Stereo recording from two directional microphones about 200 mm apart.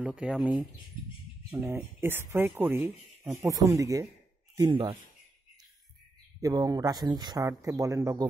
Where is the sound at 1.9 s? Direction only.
10° right (ahead or behind).